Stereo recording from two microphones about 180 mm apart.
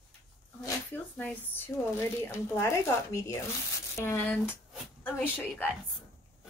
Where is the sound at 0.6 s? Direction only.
10° left (ahead or behind).